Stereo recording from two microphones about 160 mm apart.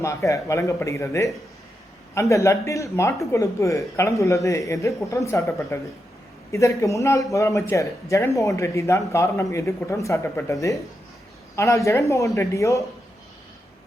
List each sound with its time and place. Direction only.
0.0 s speech: 20° left (ahead or behind)